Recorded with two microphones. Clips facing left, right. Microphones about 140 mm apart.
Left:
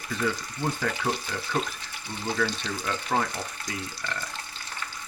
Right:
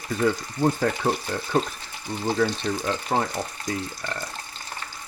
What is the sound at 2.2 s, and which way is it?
Speech, 30° right (ahead or behind).